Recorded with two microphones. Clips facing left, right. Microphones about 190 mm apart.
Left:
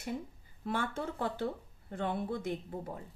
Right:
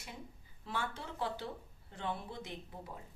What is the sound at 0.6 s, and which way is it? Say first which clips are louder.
A woman's voice: left 6 dB; 50° left (ahead or behind).